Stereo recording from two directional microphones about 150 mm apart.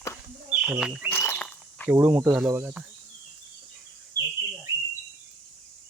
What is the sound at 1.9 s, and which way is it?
Speech, 10° right (ahead or behind).